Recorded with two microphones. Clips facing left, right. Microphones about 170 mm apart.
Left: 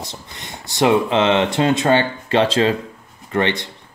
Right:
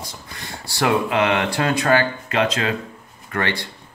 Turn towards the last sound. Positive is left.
turn(degrees=20)  # may be behind; listen again after turning